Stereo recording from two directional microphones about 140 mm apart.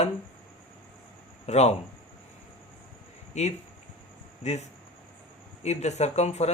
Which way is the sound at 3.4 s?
55° left (ahead or behind).